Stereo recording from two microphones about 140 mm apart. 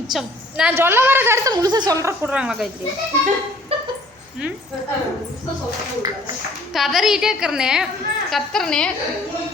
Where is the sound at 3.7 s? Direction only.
45° right (ahead or behind).